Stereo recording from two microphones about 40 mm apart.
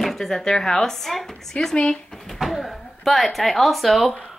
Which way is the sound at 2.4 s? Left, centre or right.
Centre.